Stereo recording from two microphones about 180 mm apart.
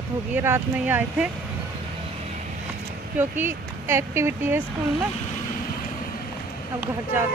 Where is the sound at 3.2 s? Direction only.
10° right (ahead or behind).